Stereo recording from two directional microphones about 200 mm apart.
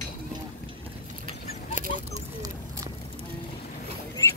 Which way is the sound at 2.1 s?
35° right (ahead or behind).